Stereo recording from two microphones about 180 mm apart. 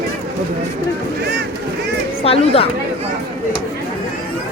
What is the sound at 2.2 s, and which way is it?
Speech, 30° left (ahead or behind).